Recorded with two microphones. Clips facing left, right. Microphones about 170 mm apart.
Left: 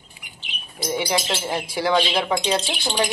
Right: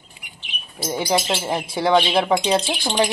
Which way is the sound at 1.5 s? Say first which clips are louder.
Right 4 dB; 25° right (ahead or behind).